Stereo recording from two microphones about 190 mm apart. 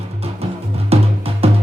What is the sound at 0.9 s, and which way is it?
Music, 30° right (ahead or behind).